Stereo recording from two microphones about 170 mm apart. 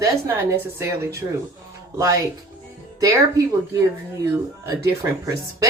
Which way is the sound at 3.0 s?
20° right (ahead or behind).